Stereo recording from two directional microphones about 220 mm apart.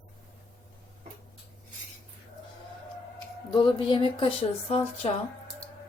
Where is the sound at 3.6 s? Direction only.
20° left (ahead or behind).